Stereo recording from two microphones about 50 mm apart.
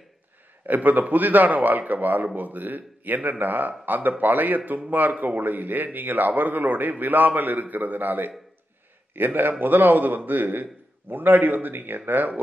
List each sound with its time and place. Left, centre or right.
0.7 s a man's voice: right